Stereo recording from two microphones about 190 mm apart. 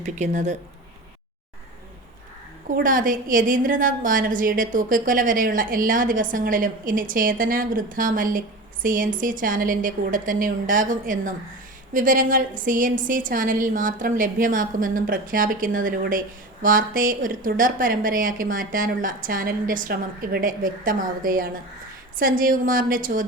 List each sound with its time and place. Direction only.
0.0 s speech: 40° right (ahead or behind)
2.6 s a woman's voice: 45° right (ahead or behind)